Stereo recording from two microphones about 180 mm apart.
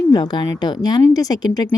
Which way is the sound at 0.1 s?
25° left (ahead or behind).